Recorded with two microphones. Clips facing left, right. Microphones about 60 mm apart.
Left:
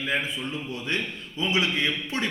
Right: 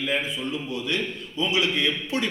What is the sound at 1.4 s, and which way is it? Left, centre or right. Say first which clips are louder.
Speech: right 1 dB; left.